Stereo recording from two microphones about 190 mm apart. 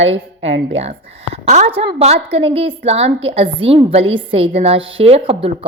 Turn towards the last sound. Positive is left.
turn(degrees=-30)  # may be behind; listen again after turning